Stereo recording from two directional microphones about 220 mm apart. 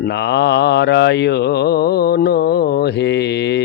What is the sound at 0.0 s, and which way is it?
Mantra, 50° left (ahead or behind).